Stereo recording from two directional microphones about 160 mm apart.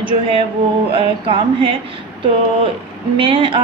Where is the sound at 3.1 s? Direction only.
35° right (ahead or behind).